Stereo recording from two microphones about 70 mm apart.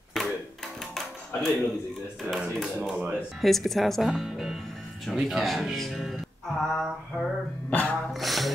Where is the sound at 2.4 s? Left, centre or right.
Centre.